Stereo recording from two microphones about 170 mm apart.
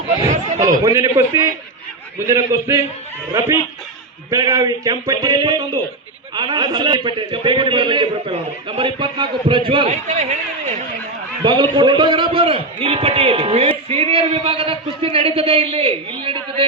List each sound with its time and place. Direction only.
0.9 s a man's voice: 20° right (ahead or behind)
9.9 s speech: 40° right (ahead or behind)
11.4 s a man's voice: 25° right (ahead or behind)